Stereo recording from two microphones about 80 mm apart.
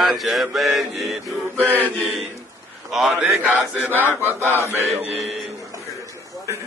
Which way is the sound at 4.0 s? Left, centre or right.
Left.